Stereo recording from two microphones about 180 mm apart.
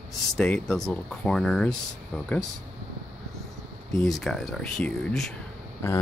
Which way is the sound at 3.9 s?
Centre (ahead or behind).